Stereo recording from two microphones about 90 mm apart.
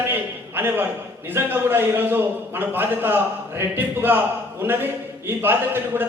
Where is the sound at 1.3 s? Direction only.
25° right (ahead or behind).